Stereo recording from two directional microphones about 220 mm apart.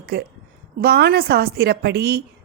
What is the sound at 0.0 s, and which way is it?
A woman's voice, 45° right (ahead or behind).